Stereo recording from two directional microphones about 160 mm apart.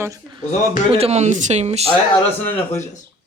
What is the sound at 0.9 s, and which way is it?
Speech, 40° right (ahead or behind).